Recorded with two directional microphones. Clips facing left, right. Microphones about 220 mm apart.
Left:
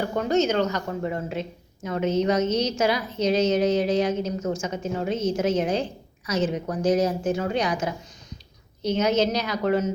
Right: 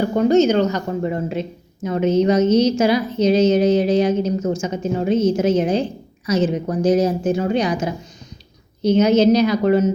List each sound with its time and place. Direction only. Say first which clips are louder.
0.0 s a woman's voice: right 8 dB; 25° right (ahead or behind)